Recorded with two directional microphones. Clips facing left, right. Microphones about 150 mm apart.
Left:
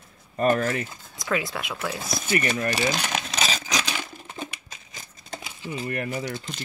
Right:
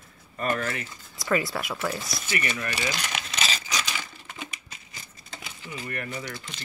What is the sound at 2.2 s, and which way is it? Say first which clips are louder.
Speech: left 7 dB; 40° left (ahead or behind).